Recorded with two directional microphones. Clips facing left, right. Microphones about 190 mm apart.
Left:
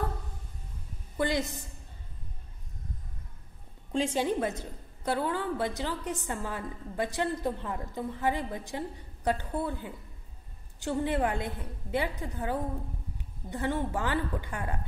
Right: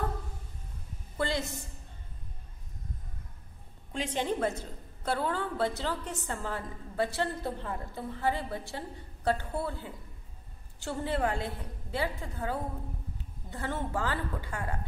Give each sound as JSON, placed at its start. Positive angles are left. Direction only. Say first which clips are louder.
{"t": 1.1, "sound": "a woman's voice", "louder": "left 3 dB", "side_deg": 15}
{"t": 4.1, "sound": "a woman's voice", "louder": "left 1 dB", "side_deg": 15}